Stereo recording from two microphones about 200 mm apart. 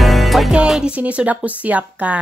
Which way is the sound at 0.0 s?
Centre (ahead or behind).